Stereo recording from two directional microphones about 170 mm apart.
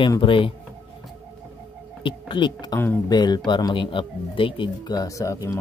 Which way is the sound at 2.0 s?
30° left (ahead or behind).